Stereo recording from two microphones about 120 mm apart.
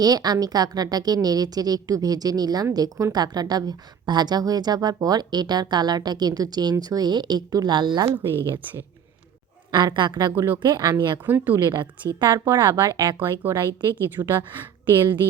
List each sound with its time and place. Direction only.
0.0 s a woman's voice: 30° right (ahead or behind)
9.7 s a woman's voice: 40° right (ahead or behind)
10.3 s speech: 20° right (ahead or behind)
10.6 s a woman's voice: 35° right (ahead or behind)
11.3 s a woman's voice: 15° right (ahead or behind)
11.7 s a woman's voice: 40° right (ahead or behind)
13.1 s a woman's voice: 15° right (ahead or behind)
13.6 s a woman's voice: 40° right (ahead or behind)